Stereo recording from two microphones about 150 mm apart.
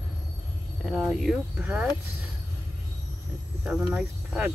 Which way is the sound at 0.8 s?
Centre (ahead or behind).